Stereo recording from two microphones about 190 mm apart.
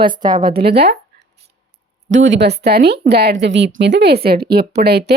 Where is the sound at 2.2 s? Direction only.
65° right (ahead or behind).